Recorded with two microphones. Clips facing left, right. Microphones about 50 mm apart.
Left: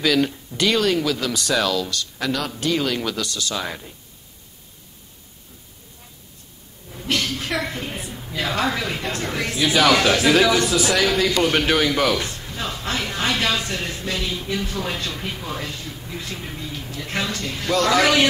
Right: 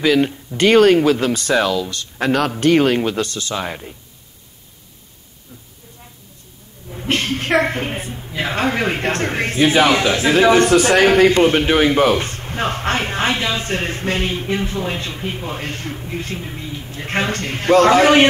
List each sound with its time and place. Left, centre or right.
0.0 s speech: right
0.6 s a man's voice: right
3.0 s a man's voice: right
7.1 s a man's voice: right
13.4 s speech: right
13.7 s a man's voice: right
15.6 s speech: right
16.0 s a man's voice: right
16.5 s a sound: centre
16.9 s a man's voice: right